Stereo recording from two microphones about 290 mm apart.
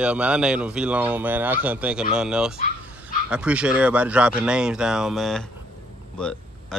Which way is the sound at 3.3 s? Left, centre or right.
Centre.